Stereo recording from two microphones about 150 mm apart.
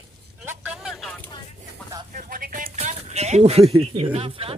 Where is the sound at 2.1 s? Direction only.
65° right (ahead or behind).